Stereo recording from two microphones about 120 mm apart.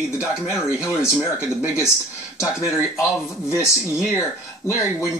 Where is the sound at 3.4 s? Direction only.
25° left (ahead or behind).